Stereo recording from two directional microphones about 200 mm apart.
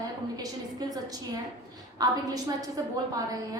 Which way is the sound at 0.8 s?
20° right (ahead or behind).